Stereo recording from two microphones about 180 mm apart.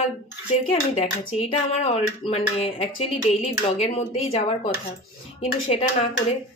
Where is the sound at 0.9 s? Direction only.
35° left (ahead or behind).